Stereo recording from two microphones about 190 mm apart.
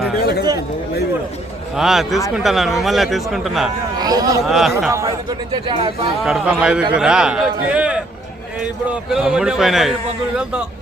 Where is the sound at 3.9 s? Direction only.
20° right (ahead or behind).